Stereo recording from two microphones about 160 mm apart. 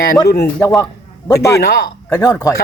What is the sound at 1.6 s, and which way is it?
Speech, 70° left (ahead or behind).